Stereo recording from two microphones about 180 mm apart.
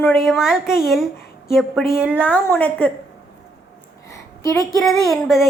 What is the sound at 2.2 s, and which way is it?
Speech, 10° left (ahead or behind).